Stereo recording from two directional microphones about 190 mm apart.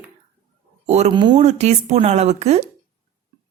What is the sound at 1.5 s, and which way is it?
A woman's voice, 35° right (ahead or behind).